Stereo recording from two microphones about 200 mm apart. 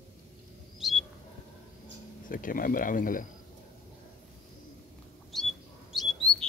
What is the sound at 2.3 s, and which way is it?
Speech, 45° left (ahead or behind).